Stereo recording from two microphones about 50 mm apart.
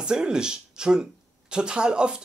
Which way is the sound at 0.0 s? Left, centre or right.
Centre.